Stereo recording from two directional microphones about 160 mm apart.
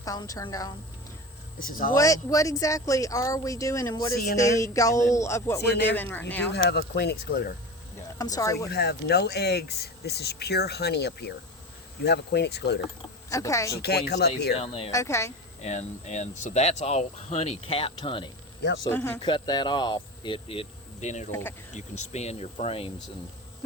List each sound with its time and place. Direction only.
0.0 s speech: 20° left (ahead or behind)
1.5 s speech: 60° left (ahead or behind)
2.0 s speech: 20° left (ahead or behind)
6.7 s speech: 90° left
8.2 s speech: 20° left (ahead or behind)
8.7 s speech: 90° left
13.3 s speech: 20° left (ahead or behind)
13.8 s speech: 90° left
14.5 s speech: 35° left (ahead or behind)
14.9 s speech: 20° left (ahead or behind)
15.6 s speech: 45° left (ahead or behind)
18.9 s speech: 15° left (ahead or behind)
19.2 s speech: 30° left (ahead or behind)